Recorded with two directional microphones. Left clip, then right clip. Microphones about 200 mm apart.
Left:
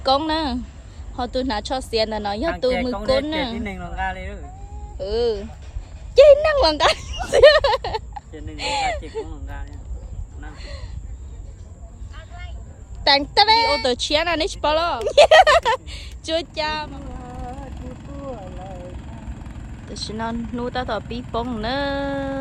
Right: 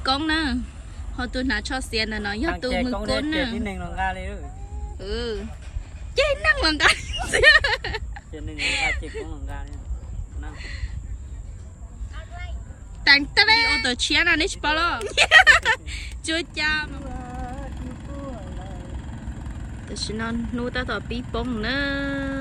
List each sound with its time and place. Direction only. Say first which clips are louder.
0.0 s speech: left 3 dB; 10° left (ahead or behind)
3.5 s speech: left 1 dB; 10° right (ahead or behind)
4.9 s speech: left 8 dB; 15° left (ahead or behind)
9.3 s speech: even; 10° right (ahead or behind)
10.5 s speech: right 2 dB; 10° left (ahead or behind)
13.1 s speech: left 1 dB; 10° left (ahead or behind)
17.7 s vehicle: left 1 dB; 15° left (ahead or behind)